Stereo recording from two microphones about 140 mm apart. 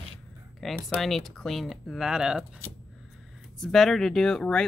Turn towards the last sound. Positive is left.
turn(degrees=5)  # may be behind; listen again after turning